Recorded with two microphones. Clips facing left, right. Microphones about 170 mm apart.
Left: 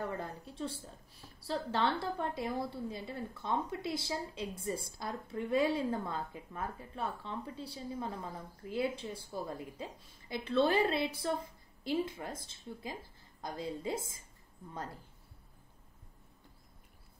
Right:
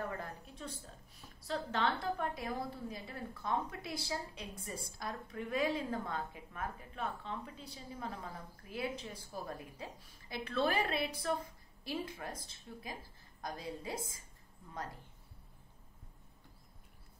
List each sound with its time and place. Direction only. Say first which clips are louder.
0.2 s a woman's voice: left 5 dB; 30° left (ahead or behind)